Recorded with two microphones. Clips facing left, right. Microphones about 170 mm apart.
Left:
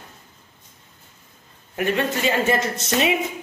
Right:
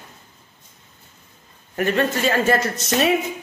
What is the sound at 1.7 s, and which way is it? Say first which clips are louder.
A man's voice: right 2 dB; 10° left (ahead or behind).